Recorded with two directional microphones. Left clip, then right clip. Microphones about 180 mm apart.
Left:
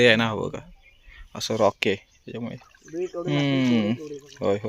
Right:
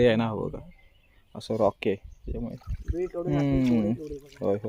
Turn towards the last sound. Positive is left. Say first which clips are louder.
# left 3 dB
turn(degrees=0)  # may be behind; listen again after turning